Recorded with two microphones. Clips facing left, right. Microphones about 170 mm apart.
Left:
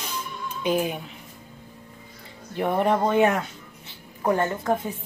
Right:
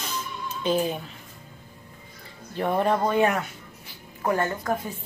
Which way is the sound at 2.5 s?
15° left (ahead or behind).